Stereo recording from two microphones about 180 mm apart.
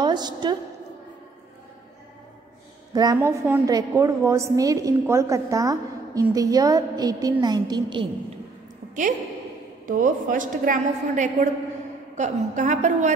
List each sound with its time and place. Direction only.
0.0 s a woman's voice: 25° right (ahead or behind)
2.9 s a woman's voice: 20° right (ahead or behind)
9.8 s a woman's voice: 45° right (ahead or behind)